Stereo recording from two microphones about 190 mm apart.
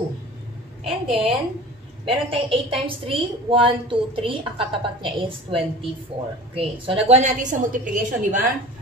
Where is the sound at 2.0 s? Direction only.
30° right (ahead or behind).